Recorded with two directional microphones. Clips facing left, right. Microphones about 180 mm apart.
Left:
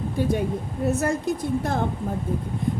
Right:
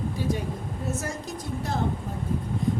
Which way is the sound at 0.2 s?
55° left (ahead or behind).